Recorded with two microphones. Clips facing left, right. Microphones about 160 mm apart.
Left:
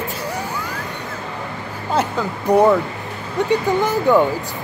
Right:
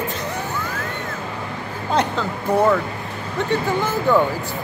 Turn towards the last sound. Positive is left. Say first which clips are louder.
# left 3 dB
turn(degrees=15)  # may be behind; listen again after turning